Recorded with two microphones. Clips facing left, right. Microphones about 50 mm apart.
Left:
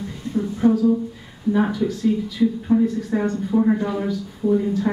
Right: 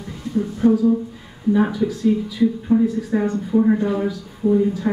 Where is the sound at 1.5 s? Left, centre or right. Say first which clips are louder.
Right 2 dB; centre.